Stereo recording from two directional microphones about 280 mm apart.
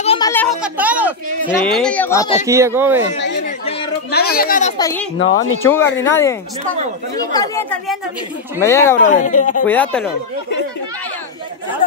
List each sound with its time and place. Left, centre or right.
0.0 s a sound: centre
0.3 s children playing: centre
1.6 s speech: centre
2.4 s speech: centre
3.4 s yodeling: left
4.1 s speech: left
4.7 s speech: centre
5.2 s speech: left
6.0 s speech: centre
9.0 s speech: left
9.7 s speech: centre